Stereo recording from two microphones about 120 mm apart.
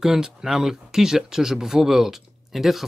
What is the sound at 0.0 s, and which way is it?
Speech, 5° right (ahead or behind).